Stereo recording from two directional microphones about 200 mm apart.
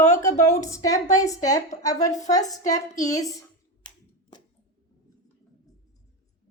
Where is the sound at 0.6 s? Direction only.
15° left (ahead or behind).